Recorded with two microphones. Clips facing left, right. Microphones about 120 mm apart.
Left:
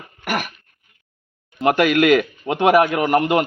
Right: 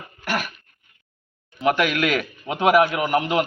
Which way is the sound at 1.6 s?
45° left (ahead or behind).